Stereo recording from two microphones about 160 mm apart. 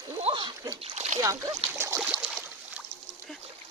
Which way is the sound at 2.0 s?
5° right (ahead or behind).